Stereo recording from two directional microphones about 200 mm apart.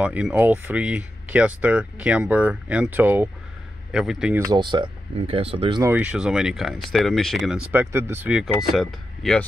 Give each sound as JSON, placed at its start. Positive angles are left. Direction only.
{"t": 0.0, "sound": "speech", "side_deg": -5}
{"t": 4.5, "sound": "speech", "side_deg": -25}
{"t": 5.8, "sound": "speech", "side_deg": -10}
{"t": 7.7, "sound": "speech", "side_deg": -10}